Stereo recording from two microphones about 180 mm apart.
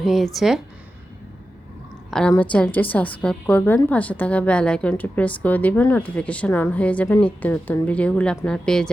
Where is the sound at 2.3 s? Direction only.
10° left (ahead or behind).